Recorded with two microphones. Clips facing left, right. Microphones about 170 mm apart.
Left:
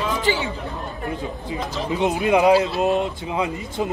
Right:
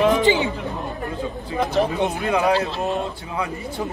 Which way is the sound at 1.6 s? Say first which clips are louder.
Right 10 dB; 65° right (ahead or behind).